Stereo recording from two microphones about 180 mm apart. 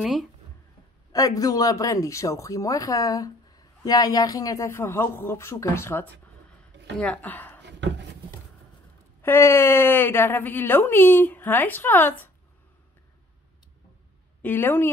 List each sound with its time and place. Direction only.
0.0 s speech: centre (ahead or behind)
1.1 s speech: 20° left (ahead or behind)
7.6 s a sound: 75° right (ahead or behind)
9.2 s speech: 15° left (ahead or behind)
14.4 s speech: 10° left (ahead or behind)